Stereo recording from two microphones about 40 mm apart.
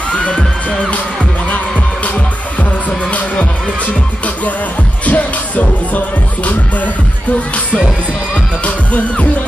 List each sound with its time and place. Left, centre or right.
0.2 s music: left
0.7 s music: left
5.0 s music: left
8.6 s music: left